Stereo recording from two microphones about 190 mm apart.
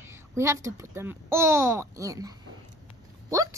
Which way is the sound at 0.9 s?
10° right (ahead or behind).